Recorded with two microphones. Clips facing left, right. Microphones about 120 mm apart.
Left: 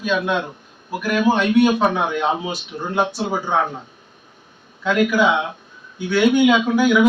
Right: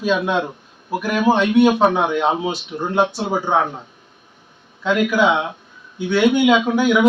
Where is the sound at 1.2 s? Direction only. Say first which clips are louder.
Right 1 dB; 25° right (ahead or behind).